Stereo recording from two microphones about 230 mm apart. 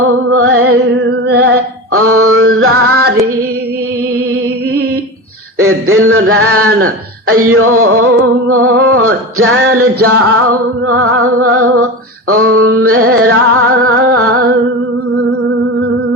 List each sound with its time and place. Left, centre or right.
0.3 s music: right
1.3 s a sound: right
1.9 s a sound: right
5.5 s music: right
6.8 s speech: right
8.4 s music: right
14.2 s humming: right